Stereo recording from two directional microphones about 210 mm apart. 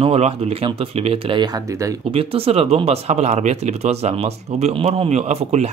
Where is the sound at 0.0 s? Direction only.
30° right (ahead or behind).